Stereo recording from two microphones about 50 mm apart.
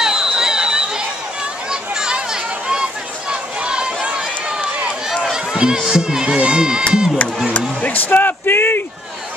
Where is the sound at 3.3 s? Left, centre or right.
Centre.